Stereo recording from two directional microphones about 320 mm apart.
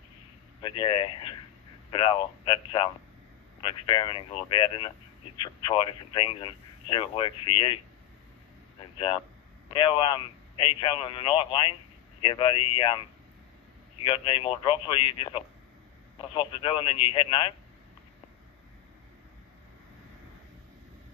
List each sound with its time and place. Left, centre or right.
0.6 s speech: centre
8.9 s speech: centre
14.0 s speech: centre